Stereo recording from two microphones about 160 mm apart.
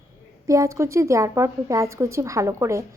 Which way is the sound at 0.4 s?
20° right (ahead or behind).